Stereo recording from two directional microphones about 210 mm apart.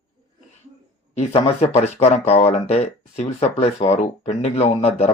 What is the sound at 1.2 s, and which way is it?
Speech, 30° left (ahead or behind).